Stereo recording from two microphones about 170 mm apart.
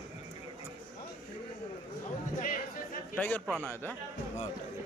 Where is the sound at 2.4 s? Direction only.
55° left (ahead or behind).